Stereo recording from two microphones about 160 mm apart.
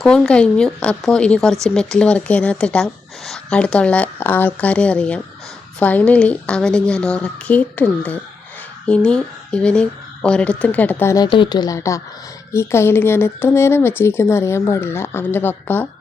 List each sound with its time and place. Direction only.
0.0 s speech: 5° left (ahead or behind)
11.3 s speech: 30° left (ahead or behind); by 15.9 s 10° left (ahead or behind)